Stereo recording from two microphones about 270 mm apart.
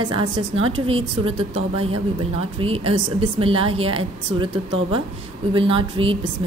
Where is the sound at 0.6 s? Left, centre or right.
Right.